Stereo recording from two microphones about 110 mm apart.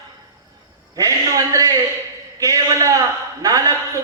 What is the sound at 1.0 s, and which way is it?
Speech, 30° right (ahead or behind).